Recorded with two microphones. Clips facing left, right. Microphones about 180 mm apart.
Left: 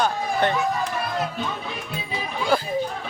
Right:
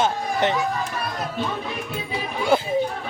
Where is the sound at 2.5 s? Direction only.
25° right (ahead or behind).